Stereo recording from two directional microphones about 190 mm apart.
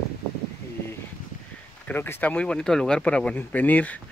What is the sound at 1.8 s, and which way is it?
Speech, 10° left (ahead or behind).